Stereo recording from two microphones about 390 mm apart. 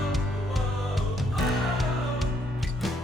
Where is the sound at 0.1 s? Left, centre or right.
Centre.